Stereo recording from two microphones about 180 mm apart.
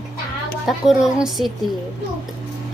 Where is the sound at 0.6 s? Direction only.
Centre (ahead or behind).